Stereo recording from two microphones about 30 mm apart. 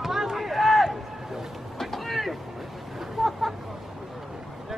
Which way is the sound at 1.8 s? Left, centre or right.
Centre.